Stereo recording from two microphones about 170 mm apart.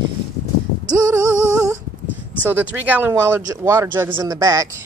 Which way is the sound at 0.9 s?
20° right (ahead or behind).